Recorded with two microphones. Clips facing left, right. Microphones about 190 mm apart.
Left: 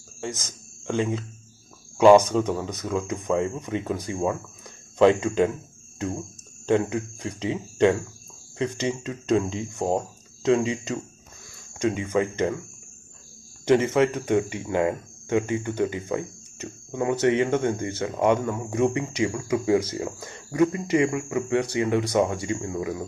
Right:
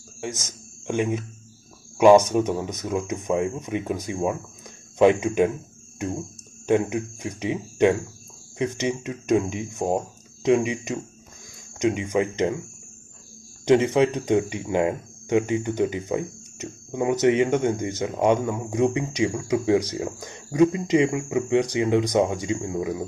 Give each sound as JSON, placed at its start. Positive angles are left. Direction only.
{"t": 0.8, "sound": "speech", "side_deg": -15}
{"t": 2.2, "sound": "speech", "side_deg": -15}
{"t": 13.7, "sound": "speech", "side_deg": -15}